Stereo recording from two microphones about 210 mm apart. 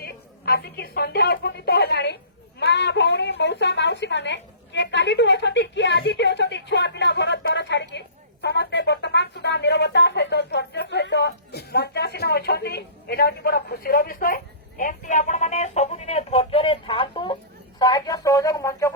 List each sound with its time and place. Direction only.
0.0 s a woman's voice: 45° left (ahead or behind); by 18.9 s 15° left (ahead or behind)